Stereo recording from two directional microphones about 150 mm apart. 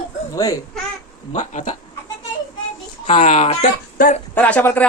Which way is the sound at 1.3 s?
55° left (ahead or behind).